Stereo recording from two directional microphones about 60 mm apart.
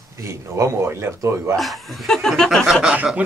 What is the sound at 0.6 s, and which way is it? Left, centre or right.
Speech, right.